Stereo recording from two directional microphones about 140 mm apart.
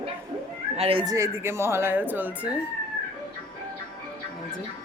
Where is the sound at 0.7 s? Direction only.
45° right (ahead or behind).